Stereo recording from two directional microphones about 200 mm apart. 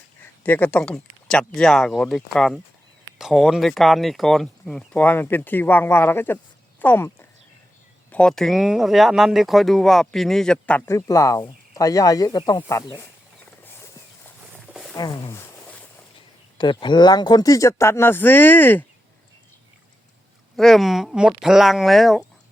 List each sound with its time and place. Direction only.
0.4 s speech: 10° left (ahead or behind)
14.7 s wild animals: centre (ahead or behind)
14.9 s a sound: 20° left (ahead or behind)
16.6 s speech: 20° left (ahead or behind)
20.6 s speech: centre (ahead or behind)